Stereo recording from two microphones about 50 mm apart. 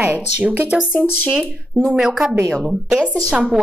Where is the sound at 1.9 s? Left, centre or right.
Centre.